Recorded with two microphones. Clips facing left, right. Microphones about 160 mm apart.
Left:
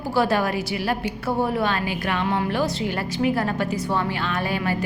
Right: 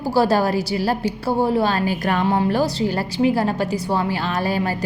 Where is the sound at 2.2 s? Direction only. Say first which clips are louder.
Right 4 dB; 30° right (ahead or behind).